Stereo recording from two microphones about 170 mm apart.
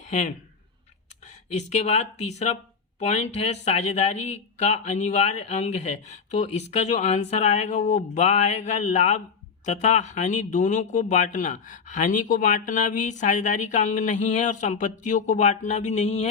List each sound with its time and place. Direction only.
0.0 s speech: 45° left (ahead or behind)